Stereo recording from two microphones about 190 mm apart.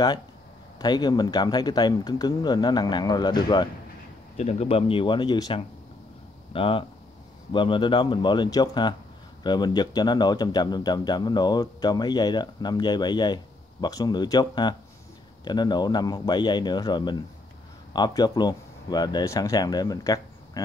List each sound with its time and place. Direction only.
0.7 s speech: 20° left (ahead or behind)
4.4 s speech: 35° left (ahead or behind)